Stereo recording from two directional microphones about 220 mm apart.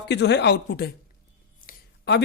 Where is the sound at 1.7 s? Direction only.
50° left (ahead or behind).